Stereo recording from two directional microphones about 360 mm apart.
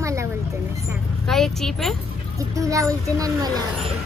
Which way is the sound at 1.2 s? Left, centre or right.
Centre.